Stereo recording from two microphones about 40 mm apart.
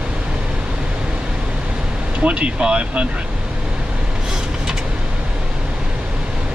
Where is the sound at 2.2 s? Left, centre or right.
Right.